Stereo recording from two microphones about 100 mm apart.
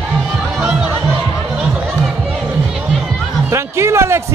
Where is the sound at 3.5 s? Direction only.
30° right (ahead or behind).